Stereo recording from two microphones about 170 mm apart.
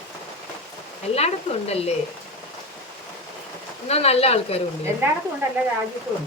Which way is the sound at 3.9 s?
35° left (ahead or behind).